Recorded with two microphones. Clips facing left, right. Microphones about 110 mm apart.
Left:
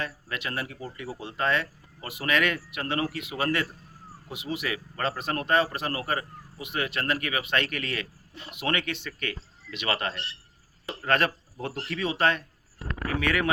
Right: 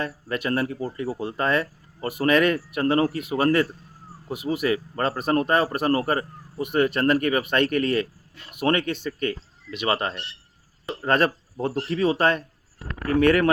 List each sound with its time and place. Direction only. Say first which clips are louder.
0.0 s a man's voice: right 6 dB; 45° right (ahead or behind)
9.6 s a man's voice: right 5 dB; 30° right (ahead or behind); by 13.5 s 50° right (ahead or behind)